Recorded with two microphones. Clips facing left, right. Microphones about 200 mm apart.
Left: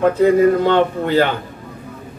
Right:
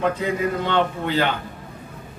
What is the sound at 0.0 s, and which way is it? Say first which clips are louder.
A man's voice: left 10 dB; 45° left (ahead or behind).